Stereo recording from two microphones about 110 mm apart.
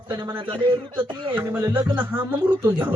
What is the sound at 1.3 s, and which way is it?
A man's voice, 20° right (ahead or behind).